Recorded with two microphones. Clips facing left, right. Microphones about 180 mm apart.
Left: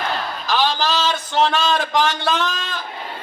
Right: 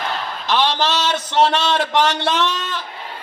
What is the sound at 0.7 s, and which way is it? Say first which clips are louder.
Speech: right 1 dB; 75° right (ahead or behind).